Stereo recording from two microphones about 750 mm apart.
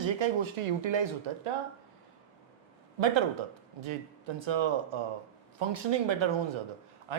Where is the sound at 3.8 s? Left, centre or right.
Right.